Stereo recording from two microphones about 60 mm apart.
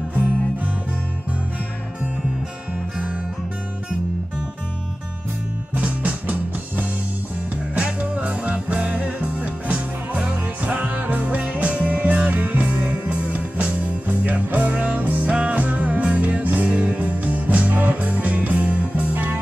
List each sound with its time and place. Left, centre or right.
5.8 s music: right
7.7 s music: right